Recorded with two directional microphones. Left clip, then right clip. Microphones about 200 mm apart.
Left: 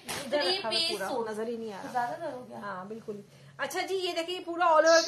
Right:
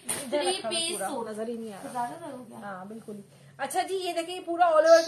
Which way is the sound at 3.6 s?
40° left (ahead or behind).